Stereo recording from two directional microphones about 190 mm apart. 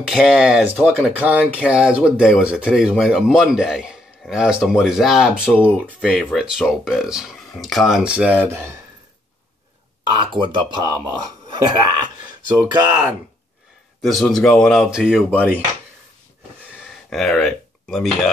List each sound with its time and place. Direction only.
0.0 s speech: centre (ahead or behind)
10.1 s speech: 25° right (ahead or behind)
14.0 s speech: centre (ahead or behind)
16.7 s a sound: centre (ahead or behind)